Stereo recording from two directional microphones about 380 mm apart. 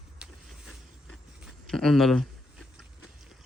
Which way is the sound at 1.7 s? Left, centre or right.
Centre.